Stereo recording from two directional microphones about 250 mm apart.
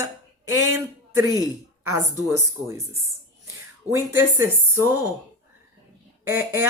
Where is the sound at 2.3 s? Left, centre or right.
Centre.